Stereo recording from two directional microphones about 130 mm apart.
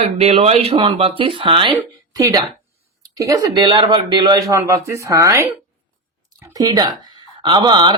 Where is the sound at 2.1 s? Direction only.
25° right (ahead or behind).